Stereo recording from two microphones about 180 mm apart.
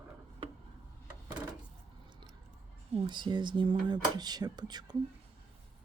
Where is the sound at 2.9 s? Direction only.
25° right (ahead or behind).